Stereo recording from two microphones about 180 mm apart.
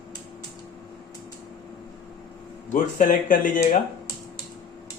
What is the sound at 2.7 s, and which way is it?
Speech, 45° left (ahead or behind).